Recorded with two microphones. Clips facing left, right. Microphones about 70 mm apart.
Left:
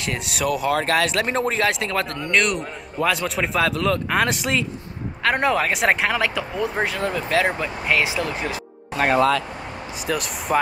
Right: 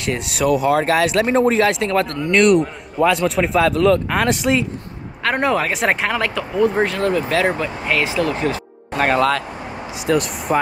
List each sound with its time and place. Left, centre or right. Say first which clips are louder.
0.0 s speech: right 5 dB; centre
8.9 s speech: right 1 dB; right
9.9 s speech: right 7 dB; centre